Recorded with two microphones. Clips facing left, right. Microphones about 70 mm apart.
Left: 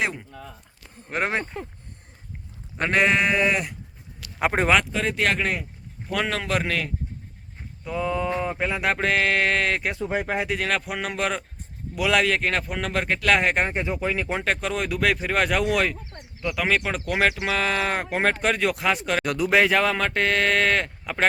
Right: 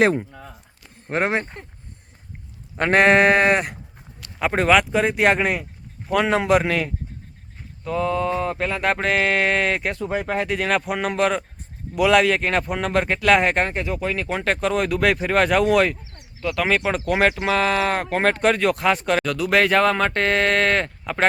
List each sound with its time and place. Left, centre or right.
0.3 s a sound: centre
1.0 s speech: right
2.7 s sheep: right
4.4 s speech: centre
4.9 s speech: centre
6.1 s speech: centre
7.9 s speech: centre
9.9 s speech: centre
13.7 s speech: centre
14.4 s speech: centre
19.2 s speech: centre